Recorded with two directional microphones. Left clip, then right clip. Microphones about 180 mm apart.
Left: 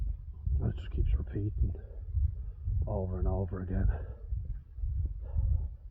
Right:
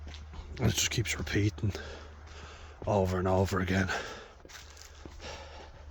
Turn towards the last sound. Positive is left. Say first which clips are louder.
# right 11 dB
turn(degrees=-35)  # may be behind; listen again after turning